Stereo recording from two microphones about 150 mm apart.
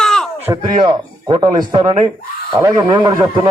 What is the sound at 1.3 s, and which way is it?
A man's voice, 30° right (ahead or behind).